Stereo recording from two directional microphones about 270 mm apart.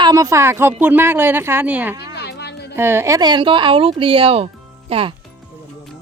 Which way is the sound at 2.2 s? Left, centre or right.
Left.